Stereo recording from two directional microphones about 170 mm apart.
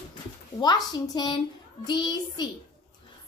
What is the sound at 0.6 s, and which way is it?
A woman's voice, 25° left (ahead or behind).